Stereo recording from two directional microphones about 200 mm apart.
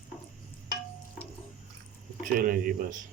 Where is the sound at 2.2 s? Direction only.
45° right (ahead or behind).